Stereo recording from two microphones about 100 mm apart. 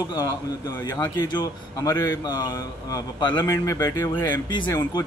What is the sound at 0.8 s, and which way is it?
A man's voice, 40° left (ahead or behind).